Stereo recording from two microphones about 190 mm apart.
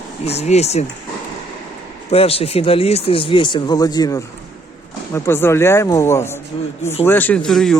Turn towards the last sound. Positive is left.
turn(degrees=0)  # may be behind; listen again after turning